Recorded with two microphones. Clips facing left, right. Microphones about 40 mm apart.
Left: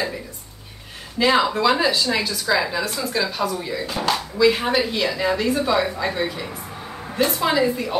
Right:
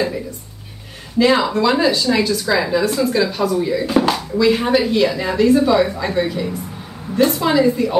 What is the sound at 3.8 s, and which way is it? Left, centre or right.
Speech, centre.